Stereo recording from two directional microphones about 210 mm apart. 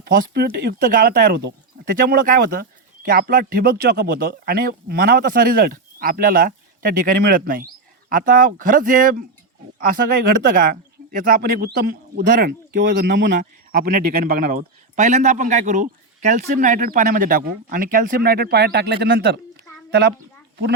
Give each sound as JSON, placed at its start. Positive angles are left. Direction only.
{"t": 0.3, "sound": "speech", "side_deg": -45}
{"t": 10.5, "sound": "speech", "side_deg": -40}
{"t": 13.8, "sound": "a woman's voice", "side_deg": -45}